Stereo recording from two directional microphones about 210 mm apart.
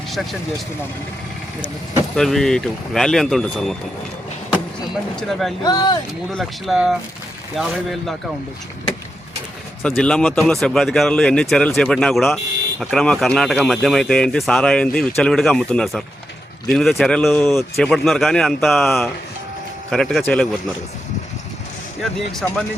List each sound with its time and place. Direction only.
2.1 s speech: centre (ahead or behind)
5.3 s speech: centre (ahead or behind)
5.6 s speech: 20° left (ahead or behind)
6.3 s speech: centre (ahead or behind)
9.8 s speech: 5° left (ahead or behind)
22.0 s speech: 5° left (ahead or behind)